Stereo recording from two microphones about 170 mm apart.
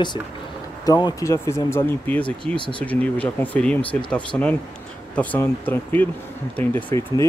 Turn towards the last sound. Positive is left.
turn(degrees=15)  # may be behind; listen again after turning